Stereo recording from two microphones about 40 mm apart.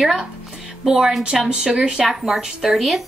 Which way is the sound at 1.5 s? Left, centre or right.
Right.